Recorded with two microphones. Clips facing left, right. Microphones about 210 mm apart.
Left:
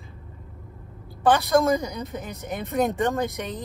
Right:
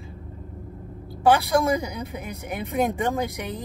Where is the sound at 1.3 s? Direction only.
15° right (ahead or behind).